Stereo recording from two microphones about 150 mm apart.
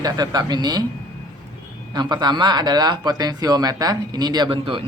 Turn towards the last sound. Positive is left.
turn(degrees=-35)  # may be behind; listen again after turning